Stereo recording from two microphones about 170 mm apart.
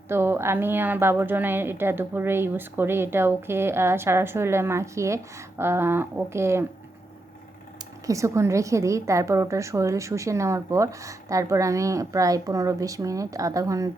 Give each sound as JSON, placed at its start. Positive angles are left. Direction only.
{"t": 0.1, "sound": "a woman's voice", "side_deg": -15}
{"t": 8.0, "sound": "a woman's voice", "side_deg": -20}